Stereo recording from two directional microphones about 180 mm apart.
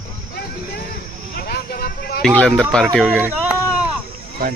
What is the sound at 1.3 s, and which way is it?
Speech, 60° left (ahead or behind).